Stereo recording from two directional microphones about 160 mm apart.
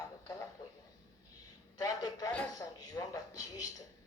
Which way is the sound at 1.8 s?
25° left (ahead or behind).